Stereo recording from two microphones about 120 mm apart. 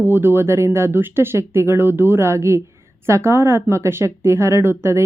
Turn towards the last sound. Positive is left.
turn(degrees=-20)  # may be behind; listen again after turning